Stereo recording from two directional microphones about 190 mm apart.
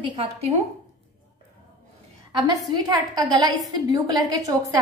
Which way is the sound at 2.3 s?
20° right (ahead or behind).